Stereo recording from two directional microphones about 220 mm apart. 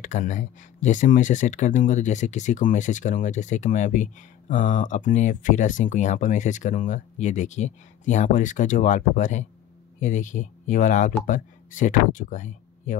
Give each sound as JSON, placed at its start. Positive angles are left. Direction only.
{"t": 0.0, "sound": "speech", "side_deg": 35}